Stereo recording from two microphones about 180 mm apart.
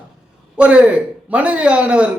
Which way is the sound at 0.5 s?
5° right (ahead or behind).